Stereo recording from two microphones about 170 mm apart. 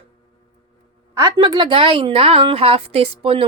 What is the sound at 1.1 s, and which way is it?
A woman's voice, 25° right (ahead or behind).